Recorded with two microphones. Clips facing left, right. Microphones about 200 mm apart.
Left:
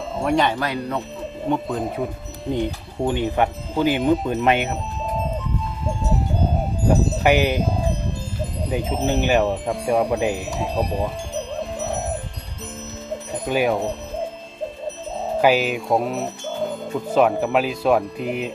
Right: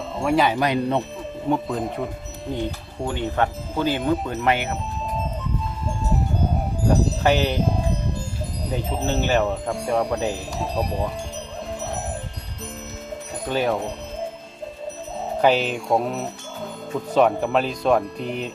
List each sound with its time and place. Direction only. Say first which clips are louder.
0.2 s speech: even; 5° right (ahead or behind)
0.5 s speech: right 4 dB; 20° right (ahead or behind)
1.5 s speech: even; centre (ahead or behind)
2.5 s speech: left 4 dB; 20° left (ahead or behind)
7.2 s speech: left 2 dB; 15° left (ahead or behind)
8.7 s speech: left 3 dB; 15° left (ahead or behind)
9.6 s speech: left 3 dB; centre (ahead or behind)
10.8 s speech: left 1 dB; centre (ahead or behind)
13.5 s speech: left 2 dB; 15° left (ahead or behind)
15.4 s speech: left 1 dB; 5° left (ahead or behind)